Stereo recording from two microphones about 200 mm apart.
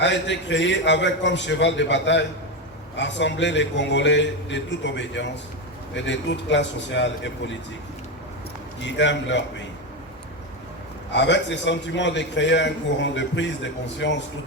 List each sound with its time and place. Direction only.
0.0 s a man's voice: 65° left (ahead or behind)
8.8 s a man's voice: 65° left (ahead or behind)
11.1 s a man's voice: 60° left (ahead or behind)